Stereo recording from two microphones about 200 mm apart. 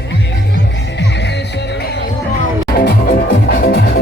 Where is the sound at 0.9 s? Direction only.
60° left (ahead or behind).